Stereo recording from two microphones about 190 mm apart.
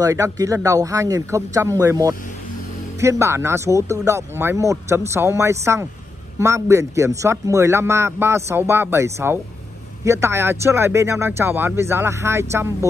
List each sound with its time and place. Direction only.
0.0 s speech: 15° right (ahead or behind)